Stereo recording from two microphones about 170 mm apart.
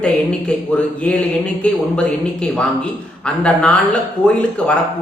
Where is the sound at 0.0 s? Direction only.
5° left (ahead or behind).